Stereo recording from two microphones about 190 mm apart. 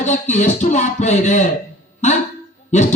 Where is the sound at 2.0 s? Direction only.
40° left (ahead or behind).